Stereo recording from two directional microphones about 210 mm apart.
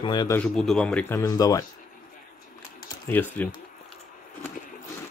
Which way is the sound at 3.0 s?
10° left (ahead or behind).